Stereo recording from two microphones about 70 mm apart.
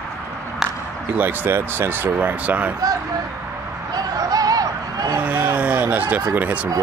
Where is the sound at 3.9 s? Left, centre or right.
Right.